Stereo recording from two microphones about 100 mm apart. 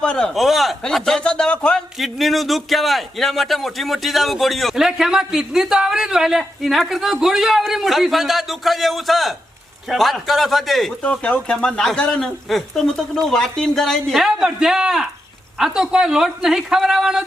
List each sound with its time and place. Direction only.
0.0 s a man's voice: 5° left (ahead or behind)
11.0 s a man's voice: 10° left (ahead or behind); by 17.2 s 5° right (ahead or behind)